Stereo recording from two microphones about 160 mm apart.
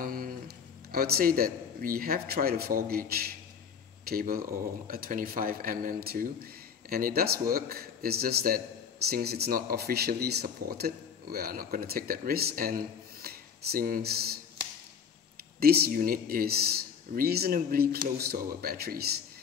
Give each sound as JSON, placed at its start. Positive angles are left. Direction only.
{"t": 0.0, "sound": "a sound", "side_deg": -65}
{"t": 0.9, "sound": "speech", "side_deg": -70}
{"t": 15.6, "sound": "speech", "side_deg": -75}